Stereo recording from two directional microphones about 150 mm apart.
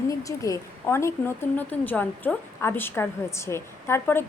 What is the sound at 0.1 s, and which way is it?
A woman's voice, 20° left (ahead or behind).